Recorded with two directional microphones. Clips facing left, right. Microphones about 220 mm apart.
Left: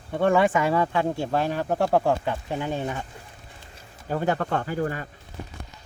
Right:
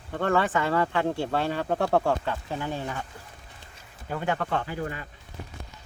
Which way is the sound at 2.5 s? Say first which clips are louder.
Left 5 dB; 20° left (ahead or behind).